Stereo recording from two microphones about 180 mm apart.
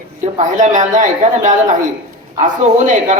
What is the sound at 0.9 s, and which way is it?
A man's voice, 45° right (ahead or behind).